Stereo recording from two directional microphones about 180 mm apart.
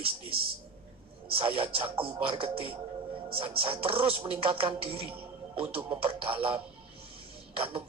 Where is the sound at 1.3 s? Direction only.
30° right (ahead or behind).